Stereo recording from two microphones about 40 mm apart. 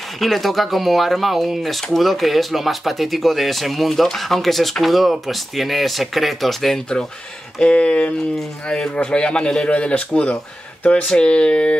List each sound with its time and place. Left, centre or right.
0.2 s speech: centre
7.6 s speech: left